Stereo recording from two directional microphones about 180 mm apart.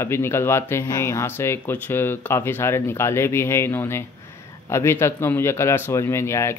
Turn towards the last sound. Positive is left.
turn(degrees=15)  # may be behind; listen again after turning